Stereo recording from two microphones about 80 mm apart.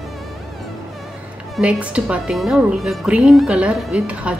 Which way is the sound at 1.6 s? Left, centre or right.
Centre.